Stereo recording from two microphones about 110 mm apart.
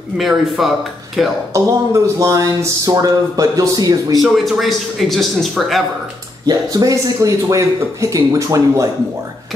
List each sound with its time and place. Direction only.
0.2 s a man's voice: centre (ahead or behind)
1.5 s speech: 30° right (ahead or behind)
4.2 s a man's voice: centre (ahead or behind)
6.4 s speech: 35° right (ahead or behind)